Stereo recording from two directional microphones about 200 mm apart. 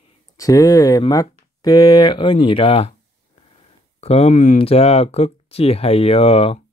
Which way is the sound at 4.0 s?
30° left (ahead or behind).